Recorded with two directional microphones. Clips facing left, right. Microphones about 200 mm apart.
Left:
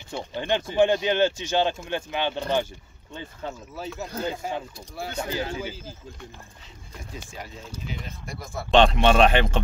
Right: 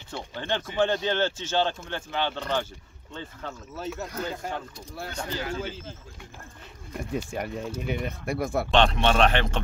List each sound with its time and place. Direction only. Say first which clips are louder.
0.4 s speech: left 5 dB; 15° left (ahead or behind)
3.7 s speech: right 3 dB; centre (ahead or behind)
5.1 s speech: left 2 dB; 25° left (ahead or behind)
7.0 s speech: right 9 dB; 60° right (ahead or behind)
8.7 s speech: left 5 dB; 10° left (ahead or behind)